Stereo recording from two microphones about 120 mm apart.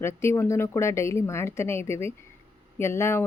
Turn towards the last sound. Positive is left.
turn(degrees=20)  # may be behind; listen again after turning